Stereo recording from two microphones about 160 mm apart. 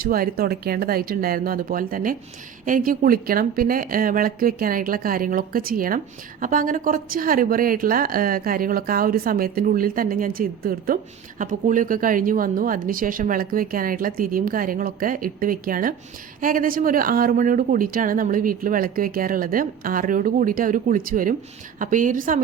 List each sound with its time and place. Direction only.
0.0 s speech: 65° right (ahead or behind)
11.3 s speech: 55° right (ahead or behind)